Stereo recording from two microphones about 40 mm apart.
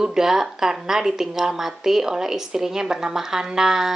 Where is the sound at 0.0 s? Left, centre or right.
Centre.